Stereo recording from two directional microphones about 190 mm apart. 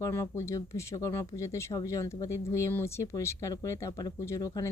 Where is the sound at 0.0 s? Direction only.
15° left (ahead or behind).